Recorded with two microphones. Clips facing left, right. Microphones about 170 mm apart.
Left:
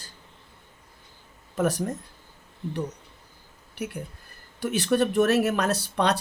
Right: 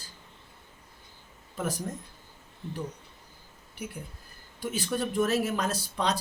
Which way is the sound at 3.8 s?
70° left (ahead or behind).